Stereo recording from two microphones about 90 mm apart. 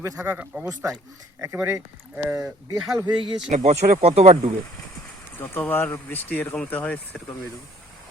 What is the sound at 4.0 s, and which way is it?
Speech, 90° right.